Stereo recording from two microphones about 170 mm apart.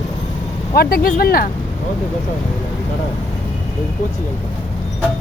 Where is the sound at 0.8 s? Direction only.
60° left (ahead or behind).